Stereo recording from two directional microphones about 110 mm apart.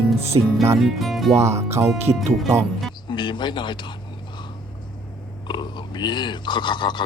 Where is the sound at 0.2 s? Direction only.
70° right (ahead or behind).